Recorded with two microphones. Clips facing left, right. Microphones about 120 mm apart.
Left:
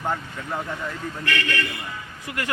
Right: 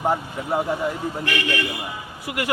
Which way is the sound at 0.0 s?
30° right (ahead or behind).